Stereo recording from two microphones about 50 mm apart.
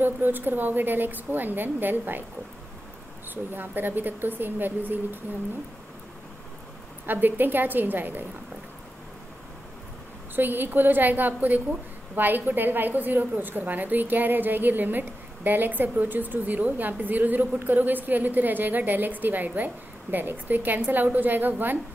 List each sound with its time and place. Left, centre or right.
0.0 s a woman's voice: right
3.5 s a woman's voice: right
7.1 s a woman's voice: right
10.3 s a woman's voice: right